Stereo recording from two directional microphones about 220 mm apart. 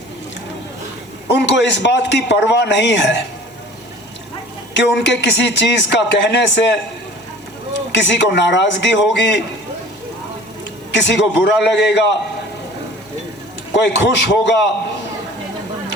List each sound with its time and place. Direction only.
1.3 s speech: 55° left (ahead or behind)
4.7 s speech: 55° left (ahead or behind)
7.9 s speech: 55° left (ahead or behind)
10.9 s speech: 55° left (ahead or behind)
13.7 s speech: 55° left (ahead or behind)